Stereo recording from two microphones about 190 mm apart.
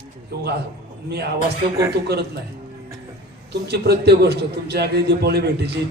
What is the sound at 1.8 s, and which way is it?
Speech, 60° right (ahead or behind).